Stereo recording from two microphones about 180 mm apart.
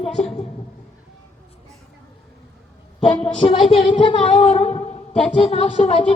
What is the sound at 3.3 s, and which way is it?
Speech, 30° left (ahead or behind).